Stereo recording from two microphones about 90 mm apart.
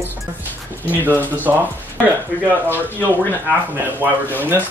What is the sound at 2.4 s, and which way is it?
Speech, 20° left (ahead or behind).